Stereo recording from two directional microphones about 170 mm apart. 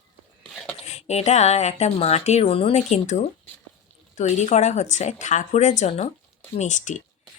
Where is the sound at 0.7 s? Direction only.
40° left (ahead or behind).